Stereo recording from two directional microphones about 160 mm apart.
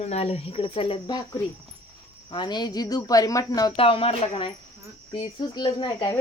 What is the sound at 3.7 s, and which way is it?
Speech, 35° left (ahead or behind).